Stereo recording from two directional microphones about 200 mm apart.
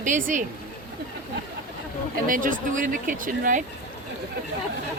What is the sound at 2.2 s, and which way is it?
Speech, 45° right (ahead or behind).